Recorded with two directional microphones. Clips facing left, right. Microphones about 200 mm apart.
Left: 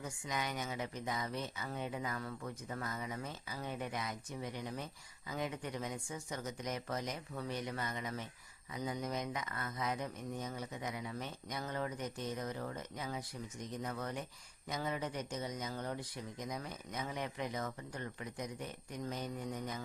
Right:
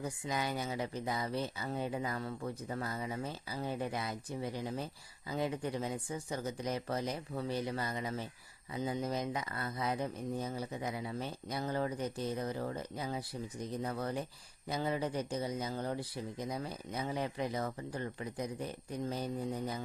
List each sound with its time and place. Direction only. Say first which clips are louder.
0.0 s speech: right 4 dB; 35° right (ahead or behind)